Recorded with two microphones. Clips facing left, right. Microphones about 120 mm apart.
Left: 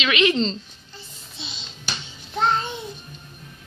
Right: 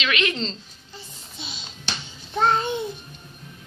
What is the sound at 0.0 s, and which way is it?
Speech, 5° left (ahead or behind).